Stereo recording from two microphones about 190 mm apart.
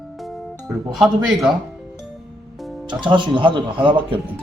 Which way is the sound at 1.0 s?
Centre (ahead or behind).